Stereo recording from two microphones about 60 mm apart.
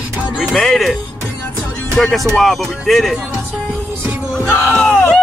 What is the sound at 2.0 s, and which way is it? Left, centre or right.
Speech, centre.